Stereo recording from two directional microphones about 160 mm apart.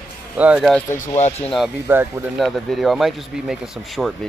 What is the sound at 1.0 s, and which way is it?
Speech, 45° left (ahead or behind).